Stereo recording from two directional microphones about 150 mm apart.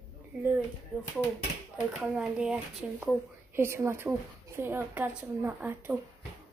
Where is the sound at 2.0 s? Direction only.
5° right (ahead or behind).